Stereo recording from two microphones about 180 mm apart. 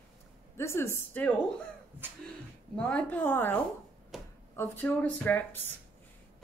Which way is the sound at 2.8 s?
5° left (ahead or behind).